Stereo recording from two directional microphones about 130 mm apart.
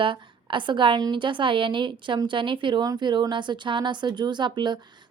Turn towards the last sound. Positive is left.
turn(degrees=-35)  # may be behind; listen again after turning